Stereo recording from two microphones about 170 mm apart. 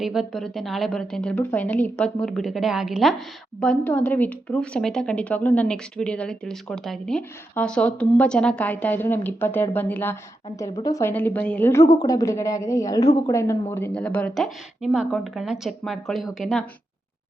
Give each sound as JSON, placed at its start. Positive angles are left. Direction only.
{"t": 0.0, "sound": "a woman's voice", "side_deg": 0}
{"t": 11.1, "sound": "speech", "side_deg": 10}